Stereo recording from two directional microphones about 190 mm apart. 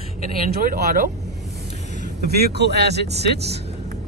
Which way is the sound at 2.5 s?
60° right (ahead or behind).